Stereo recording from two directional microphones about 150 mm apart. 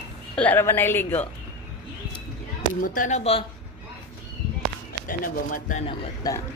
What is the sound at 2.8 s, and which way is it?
Speech, 65° left (ahead or behind).